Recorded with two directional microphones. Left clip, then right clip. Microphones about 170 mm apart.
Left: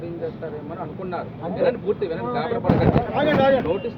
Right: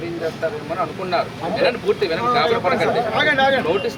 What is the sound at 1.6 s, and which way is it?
Speech, 10° right (ahead or behind).